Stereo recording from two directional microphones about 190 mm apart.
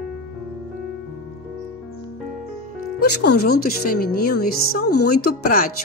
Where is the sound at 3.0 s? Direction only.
60° left (ahead or behind).